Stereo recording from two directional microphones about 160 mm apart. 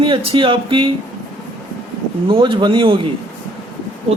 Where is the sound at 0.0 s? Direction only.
30° right (ahead or behind).